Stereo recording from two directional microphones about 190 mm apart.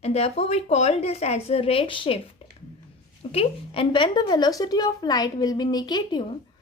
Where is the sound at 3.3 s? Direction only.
25° left (ahead or behind).